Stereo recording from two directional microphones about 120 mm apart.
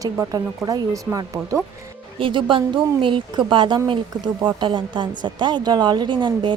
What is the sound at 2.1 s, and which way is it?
A woman's voice, 45° right (ahead or behind).